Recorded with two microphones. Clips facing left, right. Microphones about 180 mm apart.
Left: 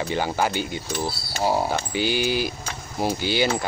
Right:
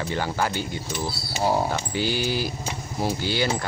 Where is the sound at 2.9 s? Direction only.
20° left (ahead or behind).